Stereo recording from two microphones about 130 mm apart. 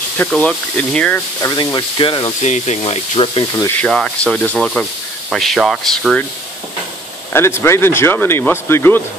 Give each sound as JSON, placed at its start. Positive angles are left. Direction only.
{"t": 0.3, "sound": "speech", "side_deg": 5}
{"t": 1.4, "sound": "speech", "side_deg": 30}
{"t": 2.4, "sound": "speech", "side_deg": 60}
{"t": 3.7, "sound": "speech", "side_deg": 5}
{"t": 7.3, "sound": "speech", "side_deg": 20}